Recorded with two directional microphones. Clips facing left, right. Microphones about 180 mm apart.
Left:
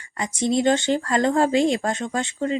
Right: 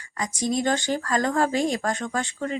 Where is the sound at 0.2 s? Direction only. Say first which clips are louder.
Left 4 dB; 25° left (ahead or behind).